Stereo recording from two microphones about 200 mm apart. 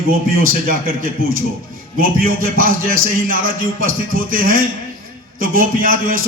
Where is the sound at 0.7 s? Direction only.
45° right (ahead or behind).